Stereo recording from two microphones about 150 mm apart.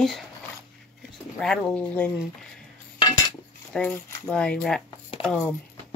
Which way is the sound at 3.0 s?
30° left (ahead or behind).